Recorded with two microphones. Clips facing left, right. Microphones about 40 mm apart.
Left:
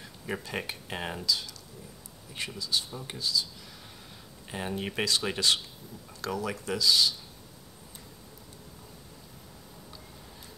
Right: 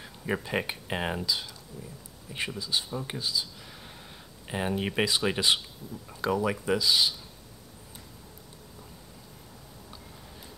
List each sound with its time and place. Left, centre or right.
0.0 s speech: centre